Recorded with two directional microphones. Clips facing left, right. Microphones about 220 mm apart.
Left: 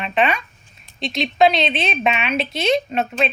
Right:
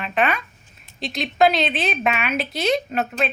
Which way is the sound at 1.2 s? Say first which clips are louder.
Left 2 dB; 25° left (ahead or behind).